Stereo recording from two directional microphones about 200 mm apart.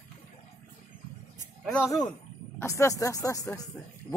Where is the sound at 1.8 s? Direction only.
15° left (ahead or behind).